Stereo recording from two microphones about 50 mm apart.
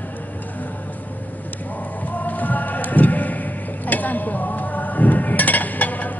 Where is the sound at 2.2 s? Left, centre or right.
Left.